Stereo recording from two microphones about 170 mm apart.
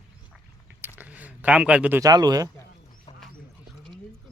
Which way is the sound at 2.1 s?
20° right (ahead or behind).